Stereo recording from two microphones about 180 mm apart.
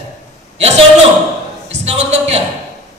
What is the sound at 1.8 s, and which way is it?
Speech, 35° right (ahead or behind).